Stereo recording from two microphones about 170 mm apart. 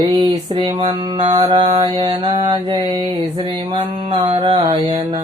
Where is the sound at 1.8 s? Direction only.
30° right (ahead or behind).